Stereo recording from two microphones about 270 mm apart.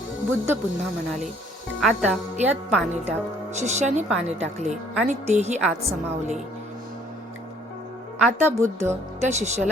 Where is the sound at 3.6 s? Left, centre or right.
Right.